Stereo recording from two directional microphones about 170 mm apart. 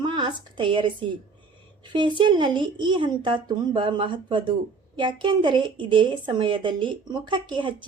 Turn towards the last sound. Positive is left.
turn(degrees=-30)  # may be behind; listen again after turning